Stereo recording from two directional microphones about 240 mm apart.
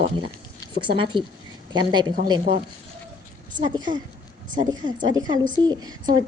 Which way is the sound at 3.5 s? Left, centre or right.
Centre.